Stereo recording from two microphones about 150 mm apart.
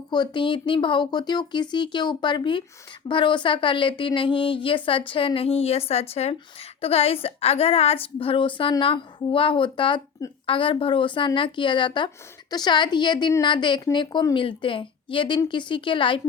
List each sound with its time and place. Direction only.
0.1 s a woman's voice: 30° left (ahead or behind)